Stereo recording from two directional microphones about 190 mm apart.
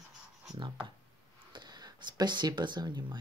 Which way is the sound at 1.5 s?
25° right (ahead or behind).